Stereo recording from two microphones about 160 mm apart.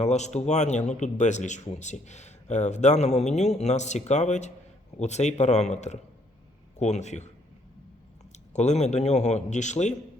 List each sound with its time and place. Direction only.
0.0 s speech: 45° left (ahead or behind)
8.5 s speech: 45° left (ahead or behind)